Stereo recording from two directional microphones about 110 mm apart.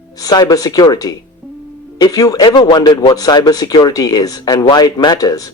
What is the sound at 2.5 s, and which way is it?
Speech, 45° left (ahead or behind).